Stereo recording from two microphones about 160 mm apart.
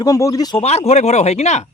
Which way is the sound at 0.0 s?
20° left (ahead or behind).